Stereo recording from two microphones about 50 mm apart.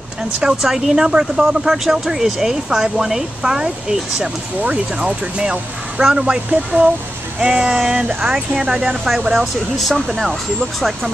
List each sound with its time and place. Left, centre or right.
0.4 s a woman's voice: centre
9.8 s speech: centre